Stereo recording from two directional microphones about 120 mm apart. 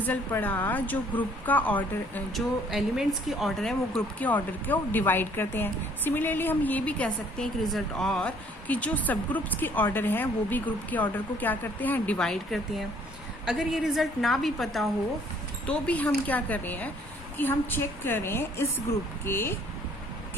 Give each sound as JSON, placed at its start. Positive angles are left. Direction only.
{"t": 0.0, "sound": "speech", "side_deg": 15}
{"t": 2.3, "sound": "a woman's voice", "side_deg": -5}
{"t": 15.6, "sound": "a woman's voice", "side_deg": 10}